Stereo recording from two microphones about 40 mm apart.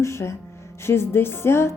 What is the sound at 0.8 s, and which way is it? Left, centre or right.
Speech, left.